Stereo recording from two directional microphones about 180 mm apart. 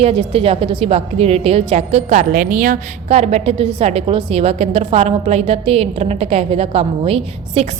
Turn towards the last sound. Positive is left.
turn(degrees=-30)  # may be behind; listen again after turning